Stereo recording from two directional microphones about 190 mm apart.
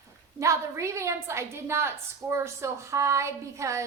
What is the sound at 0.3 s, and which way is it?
A woman's voice, 15° right (ahead or behind).